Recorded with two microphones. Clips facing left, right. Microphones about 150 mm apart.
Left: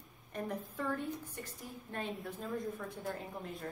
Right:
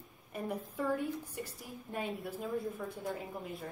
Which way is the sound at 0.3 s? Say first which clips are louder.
Right 1 dB; 10° right (ahead or behind).